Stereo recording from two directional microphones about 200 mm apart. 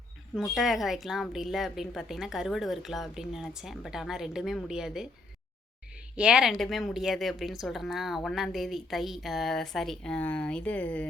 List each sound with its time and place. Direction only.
0.3 s speech: centre (ahead or behind)
6.1 s speech: 5° right (ahead or behind)